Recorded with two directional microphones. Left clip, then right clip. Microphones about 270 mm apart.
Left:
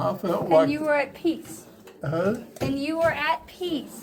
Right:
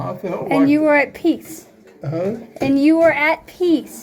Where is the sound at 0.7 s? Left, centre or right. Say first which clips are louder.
Right 9 dB; right.